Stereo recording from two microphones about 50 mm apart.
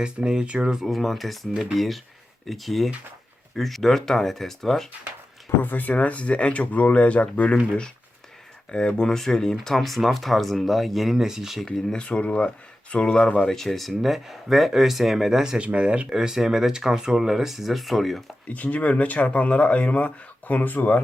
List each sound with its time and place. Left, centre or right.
0.0 s speech: centre
0.8 s speech: centre
5.5 s speech: left; by 11.6 s centre
12.0 s speech: left
13.5 s speech: centre
15.5 s speech: right
16.1 s speech: centre
18.4 s speech: left